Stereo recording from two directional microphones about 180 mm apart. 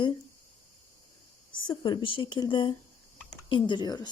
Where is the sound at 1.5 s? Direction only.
25° left (ahead or behind).